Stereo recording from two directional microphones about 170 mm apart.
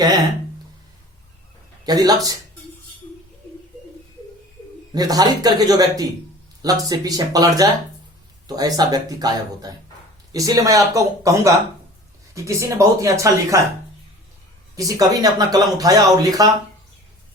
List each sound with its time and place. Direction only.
1.8 s speech: 20° right (ahead or behind)
4.9 s speech: 20° right (ahead or behind)
14.8 s speech: 20° right (ahead or behind)